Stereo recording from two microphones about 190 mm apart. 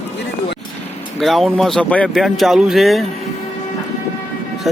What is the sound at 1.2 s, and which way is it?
Speech, centre (ahead or behind).